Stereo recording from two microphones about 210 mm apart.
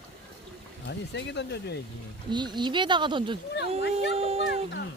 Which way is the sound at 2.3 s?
20° right (ahead or behind).